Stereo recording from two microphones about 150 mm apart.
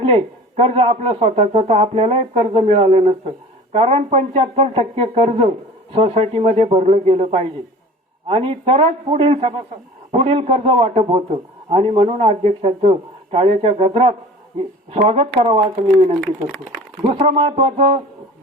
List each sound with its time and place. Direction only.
0.0 s a man's voice: 40° right (ahead or behind)
17.1 s a man's voice: 40° right (ahead or behind)
17.7 s a man's voice: 50° right (ahead or behind)